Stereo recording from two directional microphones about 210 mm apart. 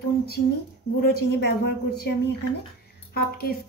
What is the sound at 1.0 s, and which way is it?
Speech, 50° left (ahead or behind).